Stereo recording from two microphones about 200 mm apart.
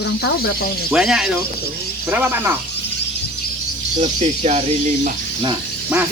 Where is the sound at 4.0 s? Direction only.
35° right (ahead or behind).